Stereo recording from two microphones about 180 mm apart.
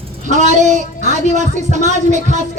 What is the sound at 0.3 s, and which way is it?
A woman's voice, 40° right (ahead or behind).